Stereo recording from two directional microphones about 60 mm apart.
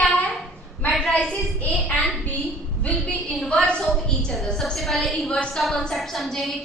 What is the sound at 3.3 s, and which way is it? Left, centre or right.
A woman's voice, centre.